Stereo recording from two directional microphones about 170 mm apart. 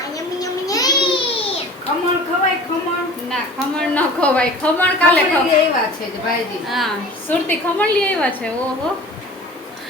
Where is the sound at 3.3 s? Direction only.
5° left (ahead or behind).